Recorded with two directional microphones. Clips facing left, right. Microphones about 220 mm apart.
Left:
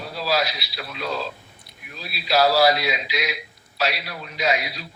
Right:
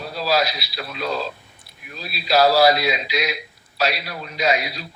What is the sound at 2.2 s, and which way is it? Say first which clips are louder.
A man's voice: right 2 dB; 40° right (ahead or behind).